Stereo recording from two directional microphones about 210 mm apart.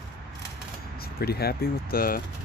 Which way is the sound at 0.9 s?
45° left (ahead or behind).